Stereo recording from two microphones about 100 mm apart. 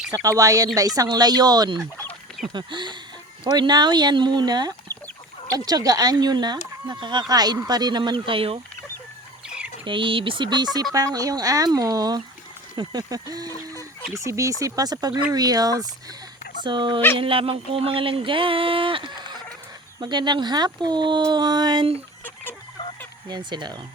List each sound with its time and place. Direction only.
0.1 s speech: 35° right (ahead or behind); by 8.5 s 65° right (ahead or behind)
9.5 s a sound: 10° right (ahead or behind)
9.8 s speech: 55° right (ahead or behind)
10.9 s speech: 35° right (ahead or behind)
16.6 s speech: 50° right (ahead or behind)
23.3 s speech: 50° right (ahead or behind)